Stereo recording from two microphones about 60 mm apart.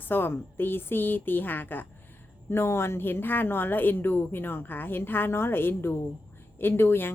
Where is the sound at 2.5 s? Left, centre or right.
Left.